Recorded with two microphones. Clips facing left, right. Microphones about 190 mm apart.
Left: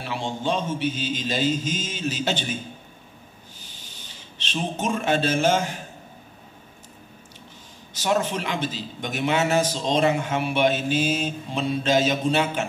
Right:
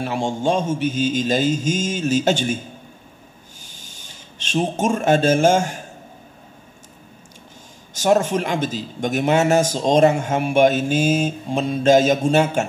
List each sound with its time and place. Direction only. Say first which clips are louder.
0.0 s a man's voice: right 6 dB; 45° right (ahead or behind)
3.6 s a sound: right 2 dB; 45° right (ahead or behind)
7.9 s a man's voice: right 6 dB; 45° right (ahead or behind)